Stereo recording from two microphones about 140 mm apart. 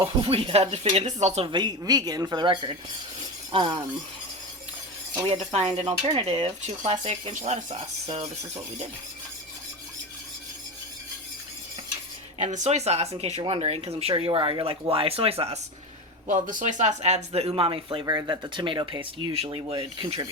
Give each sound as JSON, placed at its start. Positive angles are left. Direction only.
{"t": 0.0, "sound": "speech", "side_deg": -40}
{"t": 1.5, "sound": "speech", "side_deg": -30}
{"t": 5.5, "sound": "speech", "side_deg": -50}
{"t": 8.0, "sound": "speech", "side_deg": -40}
{"t": 12.4, "sound": "speech", "side_deg": -55}
{"t": 16.2, "sound": "speech", "side_deg": -70}
{"t": 18.0, "sound": "speech", "side_deg": -25}